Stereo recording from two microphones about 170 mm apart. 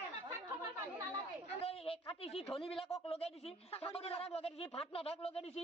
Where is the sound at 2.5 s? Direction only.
35° left (ahead or behind).